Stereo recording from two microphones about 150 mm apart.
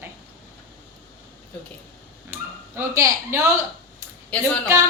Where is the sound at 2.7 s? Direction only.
20° right (ahead or behind).